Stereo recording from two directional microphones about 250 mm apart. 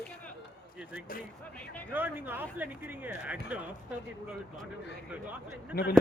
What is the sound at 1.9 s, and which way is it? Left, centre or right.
Speech, centre.